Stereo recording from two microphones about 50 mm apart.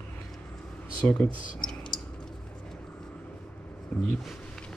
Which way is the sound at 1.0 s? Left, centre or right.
Left.